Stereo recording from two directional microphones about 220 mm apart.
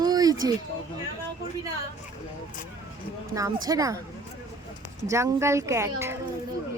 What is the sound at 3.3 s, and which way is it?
Speech, 15° right (ahead or behind).